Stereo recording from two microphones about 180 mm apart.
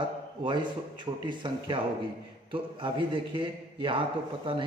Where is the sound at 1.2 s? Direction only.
25° right (ahead or behind).